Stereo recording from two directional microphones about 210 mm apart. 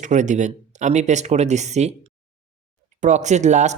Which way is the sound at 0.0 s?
35° right (ahead or behind).